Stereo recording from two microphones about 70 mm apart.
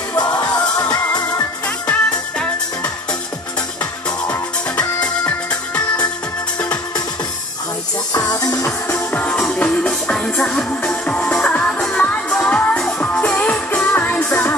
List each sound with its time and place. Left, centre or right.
0.1 s music: left
1.9 s music: centre
4.3 s music: centre
8.8 s music: left
9.4 s music: centre; by 14.5 s left